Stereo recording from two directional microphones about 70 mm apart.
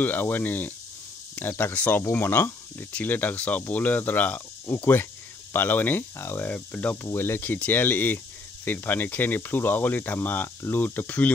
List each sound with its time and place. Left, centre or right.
0.0 s speech: left
7.1 s speech: left